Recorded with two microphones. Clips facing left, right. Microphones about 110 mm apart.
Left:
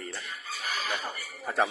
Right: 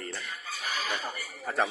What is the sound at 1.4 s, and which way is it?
Speech, 10° left (ahead or behind).